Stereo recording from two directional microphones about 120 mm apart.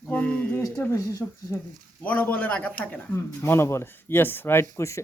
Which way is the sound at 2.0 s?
10° left (ahead or behind).